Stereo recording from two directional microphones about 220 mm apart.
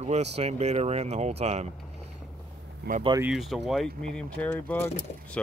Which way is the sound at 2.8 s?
45° right (ahead or behind).